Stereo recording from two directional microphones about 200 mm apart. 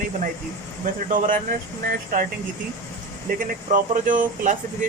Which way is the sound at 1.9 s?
45° right (ahead or behind).